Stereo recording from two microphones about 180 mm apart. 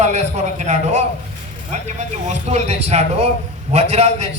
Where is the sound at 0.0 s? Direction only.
40° right (ahead or behind).